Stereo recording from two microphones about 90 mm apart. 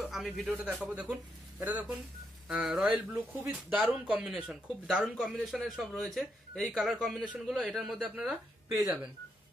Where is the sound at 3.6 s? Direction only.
15° right (ahead or behind).